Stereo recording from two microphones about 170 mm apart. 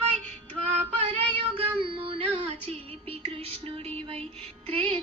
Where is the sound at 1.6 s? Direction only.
30° right (ahead or behind).